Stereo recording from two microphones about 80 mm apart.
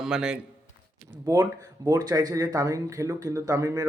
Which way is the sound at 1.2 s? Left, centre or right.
Right.